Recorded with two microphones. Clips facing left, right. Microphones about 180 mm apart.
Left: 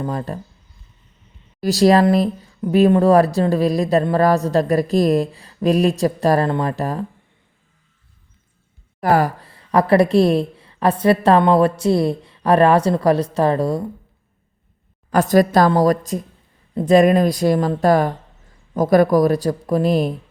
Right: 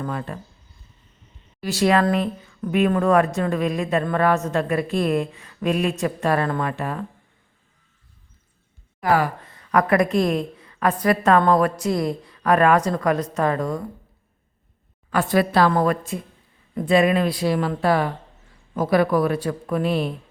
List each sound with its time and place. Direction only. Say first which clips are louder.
0.0 s a woman's voice: left 4 dB; 35° left (ahead or behind)
1.6 s a woman's voice: left 6 dB; 35° left (ahead or behind)
9.0 s a woman's voice: left 4 dB; 40° left (ahead or behind)
15.1 s a woman's voice: left 5 dB; 40° left (ahead or behind)